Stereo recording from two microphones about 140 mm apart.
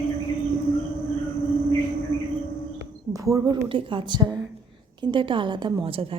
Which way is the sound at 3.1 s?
25° right (ahead or behind).